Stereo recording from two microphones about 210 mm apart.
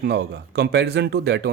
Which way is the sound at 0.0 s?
50° right (ahead or behind).